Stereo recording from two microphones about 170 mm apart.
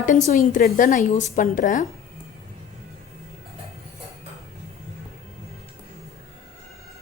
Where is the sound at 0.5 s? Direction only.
50° left (ahead or behind).